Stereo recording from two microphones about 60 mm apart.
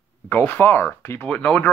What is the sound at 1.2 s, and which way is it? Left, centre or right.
Speech, left.